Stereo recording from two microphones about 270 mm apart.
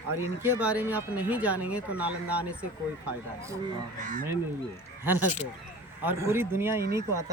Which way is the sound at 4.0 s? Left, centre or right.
Right.